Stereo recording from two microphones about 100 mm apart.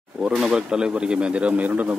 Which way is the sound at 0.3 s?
5° right (ahead or behind).